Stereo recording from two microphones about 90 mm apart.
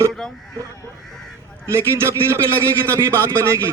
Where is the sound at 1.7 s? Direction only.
30° right (ahead or behind).